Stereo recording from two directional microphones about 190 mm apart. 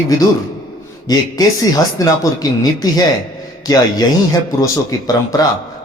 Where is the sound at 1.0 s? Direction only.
20° left (ahead or behind).